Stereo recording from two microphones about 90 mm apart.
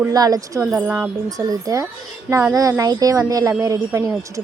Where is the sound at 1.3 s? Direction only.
40° right (ahead or behind).